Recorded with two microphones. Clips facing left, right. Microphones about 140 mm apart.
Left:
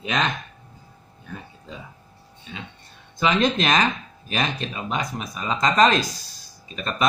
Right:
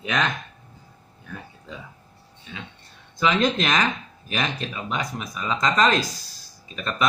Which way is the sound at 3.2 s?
20° left (ahead or behind).